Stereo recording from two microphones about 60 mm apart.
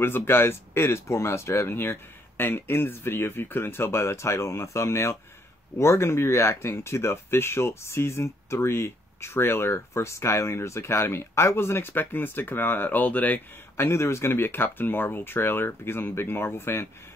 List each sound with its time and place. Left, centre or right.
0.0 s speech: left
13.7 s speech: left